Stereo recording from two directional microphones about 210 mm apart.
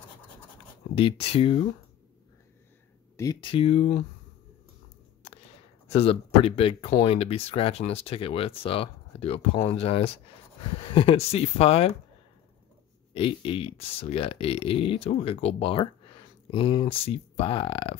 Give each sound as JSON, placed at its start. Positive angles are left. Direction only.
{"t": 0.9, "sound": "speech", "side_deg": 25}
{"t": 3.2, "sound": "speech", "side_deg": 20}
{"t": 5.9, "sound": "speech", "side_deg": 30}
{"t": 13.1, "sound": "speech", "side_deg": 25}